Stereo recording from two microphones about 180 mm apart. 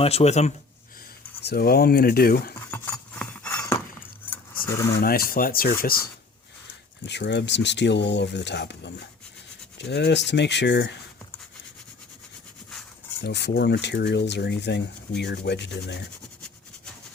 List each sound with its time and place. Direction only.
0.0 s speech: 35° left (ahead or behind)
1.5 s speech: 60° left (ahead or behind)
2.6 s chink: 10° left (ahead or behind)
4.9 s speech: 55° left (ahead or behind)
7.0 s rub: 75° left (ahead or behind)
13.2 s rub: 65° left (ahead or behind)